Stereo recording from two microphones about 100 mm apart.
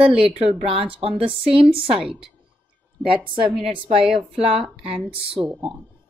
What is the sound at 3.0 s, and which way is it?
Speech, 60° right (ahead or behind).